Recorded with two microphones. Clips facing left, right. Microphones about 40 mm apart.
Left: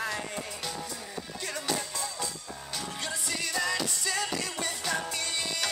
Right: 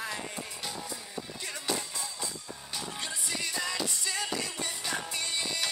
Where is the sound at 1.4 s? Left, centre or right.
Centre.